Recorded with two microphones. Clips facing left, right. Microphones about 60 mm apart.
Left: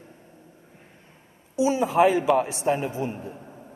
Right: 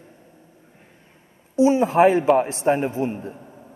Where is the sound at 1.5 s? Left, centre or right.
Right.